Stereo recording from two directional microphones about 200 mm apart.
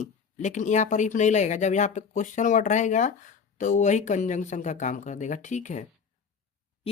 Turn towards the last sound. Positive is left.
turn(degrees=35)  # may be behind; listen again after turning